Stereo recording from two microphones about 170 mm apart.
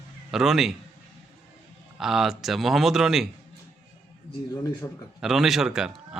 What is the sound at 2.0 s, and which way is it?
Speech, centre (ahead or behind).